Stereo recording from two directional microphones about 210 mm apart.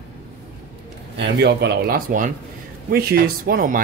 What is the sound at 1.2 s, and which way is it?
Mantra, 55° right (ahead or behind).